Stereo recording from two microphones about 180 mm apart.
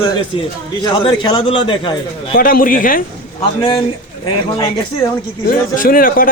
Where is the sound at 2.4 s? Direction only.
50° left (ahead or behind).